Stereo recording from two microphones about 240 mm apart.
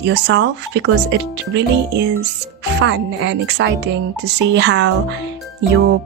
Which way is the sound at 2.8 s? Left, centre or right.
Right.